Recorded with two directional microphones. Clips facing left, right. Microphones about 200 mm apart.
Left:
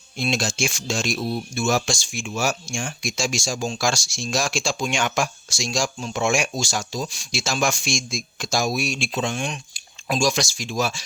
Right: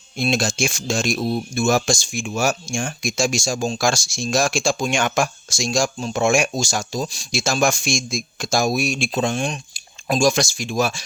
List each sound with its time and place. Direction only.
0.2 s speech: 50° right (ahead or behind)